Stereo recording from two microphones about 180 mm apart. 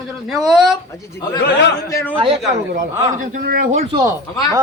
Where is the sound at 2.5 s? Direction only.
45° right (ahead or behind).